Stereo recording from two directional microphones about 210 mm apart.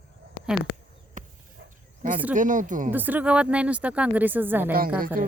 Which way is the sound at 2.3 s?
35° right (ahead or behind).